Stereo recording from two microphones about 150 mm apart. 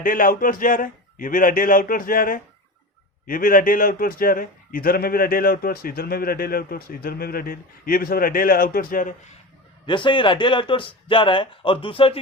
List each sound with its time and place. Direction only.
0.0 s a man's voice: 65° left (ahead or behind)
9.8 s speech: 35° left (ahead or behind)